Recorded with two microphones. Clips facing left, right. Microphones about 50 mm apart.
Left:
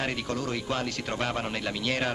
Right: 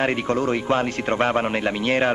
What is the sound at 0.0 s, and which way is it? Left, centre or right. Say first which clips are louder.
A man's voice: right 9 dB; right.